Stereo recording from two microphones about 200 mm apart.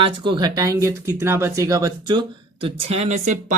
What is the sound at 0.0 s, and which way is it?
Speech, 20° right (ahead or behind).